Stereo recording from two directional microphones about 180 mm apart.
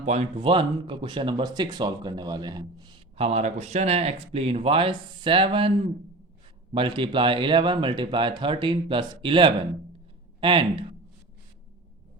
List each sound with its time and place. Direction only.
0.0 s speech: 40° right (ahead or behind)
3.2 s speech: 40° right (ahead or behind)
6.7 s speech: 30° right (ahead or behind)